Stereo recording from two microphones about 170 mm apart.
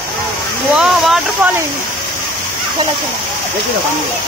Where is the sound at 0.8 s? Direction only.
5° right (ahead or behind).